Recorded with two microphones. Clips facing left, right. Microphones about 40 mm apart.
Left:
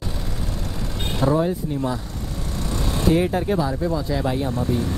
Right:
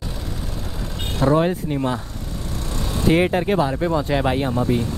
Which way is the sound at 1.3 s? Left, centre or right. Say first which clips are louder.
Right 3 dB; right.